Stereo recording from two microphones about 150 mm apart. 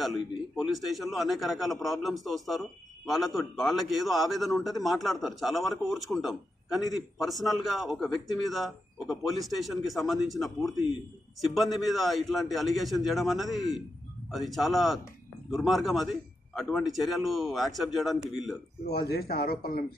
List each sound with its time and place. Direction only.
0.0 s a man's voice: centre (ahead or behind)
18.9 s speech: 90° left